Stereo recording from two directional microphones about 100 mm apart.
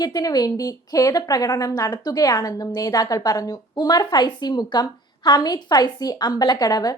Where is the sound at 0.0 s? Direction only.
40° left (ahead or behind).